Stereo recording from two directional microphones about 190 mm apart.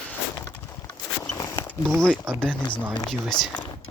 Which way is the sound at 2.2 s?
10° right (ahead or behind).